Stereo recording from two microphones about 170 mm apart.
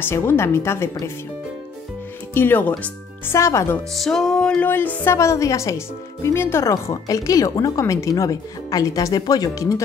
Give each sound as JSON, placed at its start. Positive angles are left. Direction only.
{"t": 0.0, "sound": "a woman's voice", "side_deg": 15}
{"t": 2.3, "sound": "a woman's voice", "side_deg": 10}
{"t": 3.9, "sound": "a woman's voice", "side_deg": 0}